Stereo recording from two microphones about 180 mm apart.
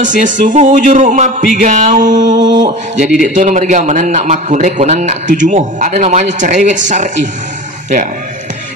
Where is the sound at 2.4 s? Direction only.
25° right (ahead or behind).